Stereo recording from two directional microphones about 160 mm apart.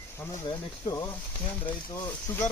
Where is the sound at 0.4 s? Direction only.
25° left (ahead or behind).